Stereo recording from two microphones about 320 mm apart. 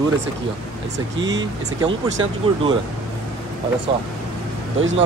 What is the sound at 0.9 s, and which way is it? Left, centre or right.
Speech, right.